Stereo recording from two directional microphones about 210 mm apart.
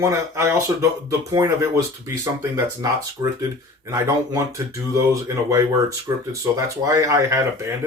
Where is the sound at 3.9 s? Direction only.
15° right (ahead or behind).